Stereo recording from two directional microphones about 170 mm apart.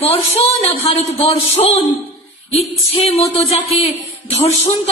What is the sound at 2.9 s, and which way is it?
Speech, 35° left (ahead or behind).